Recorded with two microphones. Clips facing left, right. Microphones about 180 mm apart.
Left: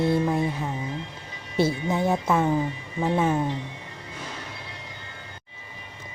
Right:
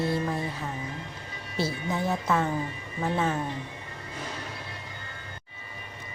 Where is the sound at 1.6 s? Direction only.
20° left (ahead or behind).